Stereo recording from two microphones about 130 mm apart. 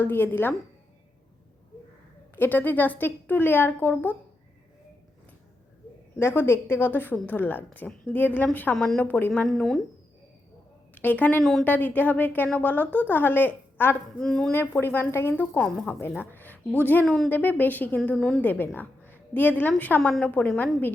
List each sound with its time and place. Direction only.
0.0 s a woman's voice: 15° left (ahead or behind)
2.3 s a woman's voice: 15° left (ahead or behind)
6.1 s a woman's voice: 20° left (ahead or behind)
8.7 s a woman's voice: 5° left (ahead or behind)
10.9 s a woman's voice: 15° left (ahead or behind)
14.2 s a woman's voice: 5° left (ahead or behind)
14.5 s a woman's voice: 15° left (ahead or behind)
16.3 s a sound: 15° left (ahead or behind)
16.8 s a woman's voice: 10° left (ahead or behind)
20.0 s a woman's voice: 5° left (ahead or behind)